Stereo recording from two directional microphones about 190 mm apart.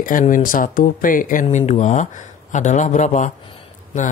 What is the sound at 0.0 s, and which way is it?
Speech, 45° left (ahead or behind).